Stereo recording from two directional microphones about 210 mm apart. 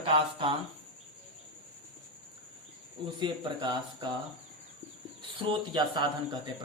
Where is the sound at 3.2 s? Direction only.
20° right (ahead or behind).